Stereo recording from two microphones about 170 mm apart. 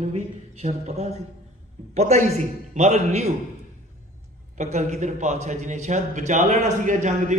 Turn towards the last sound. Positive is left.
turn(degrees=-45)  # may be behind; listen again after turning